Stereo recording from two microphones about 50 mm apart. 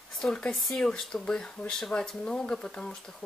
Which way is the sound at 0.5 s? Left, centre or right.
Centre.